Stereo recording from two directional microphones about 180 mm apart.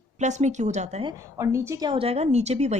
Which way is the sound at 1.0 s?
15° right (ahead or behind).